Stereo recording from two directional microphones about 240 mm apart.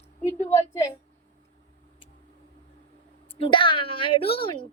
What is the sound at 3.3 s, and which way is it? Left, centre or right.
A woman's voice, left.